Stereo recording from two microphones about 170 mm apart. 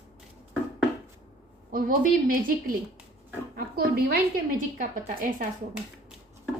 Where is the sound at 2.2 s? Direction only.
55° right (ahead or behind).